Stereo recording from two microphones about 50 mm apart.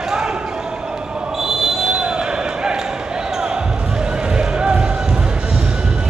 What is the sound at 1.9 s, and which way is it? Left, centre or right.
Basketball bounce, centre.